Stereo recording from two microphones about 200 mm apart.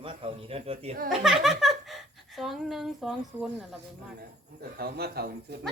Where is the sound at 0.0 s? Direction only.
25° right (ahead or behind).